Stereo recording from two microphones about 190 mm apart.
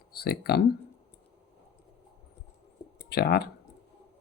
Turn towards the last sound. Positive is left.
turn(degrees=55)  # may be behind; listen again after turning